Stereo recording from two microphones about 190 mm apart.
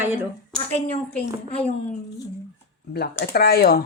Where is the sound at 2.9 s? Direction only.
55° left (ahead or behind).